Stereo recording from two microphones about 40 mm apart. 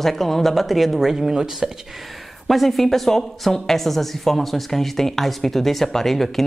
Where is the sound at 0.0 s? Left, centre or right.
Centre.